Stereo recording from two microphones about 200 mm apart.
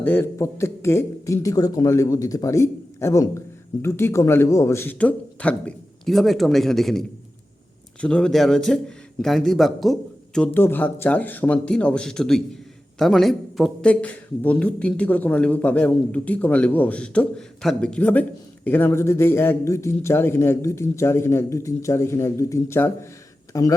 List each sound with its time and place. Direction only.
0.0 s a man's voice: 10° left (ahead or behind)
8.0 s a man's voice: 5° left (ahead or behind)